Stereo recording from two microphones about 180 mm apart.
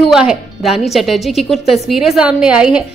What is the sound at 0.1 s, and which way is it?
A woman's voice, 5° right (ahead or behind).